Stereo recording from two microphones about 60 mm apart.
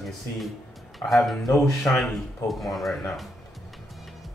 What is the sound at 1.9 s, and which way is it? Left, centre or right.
Speech, left.